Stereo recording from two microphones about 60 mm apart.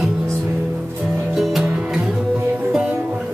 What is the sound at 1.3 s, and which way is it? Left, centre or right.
Music, centre.